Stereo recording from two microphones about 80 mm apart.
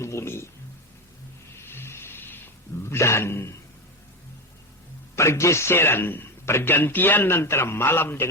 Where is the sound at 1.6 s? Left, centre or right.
Left.